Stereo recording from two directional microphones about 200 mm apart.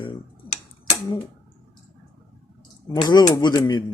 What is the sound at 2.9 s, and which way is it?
Speech, 20° left (ahead or behind).